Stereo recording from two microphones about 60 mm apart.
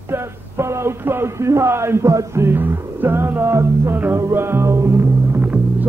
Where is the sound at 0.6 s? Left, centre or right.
Right.